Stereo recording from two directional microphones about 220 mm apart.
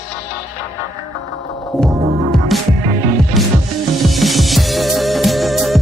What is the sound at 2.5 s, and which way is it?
Music, centre (ahead or behind).